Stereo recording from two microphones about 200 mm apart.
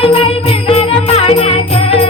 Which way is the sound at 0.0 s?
30° left (ahead or behind).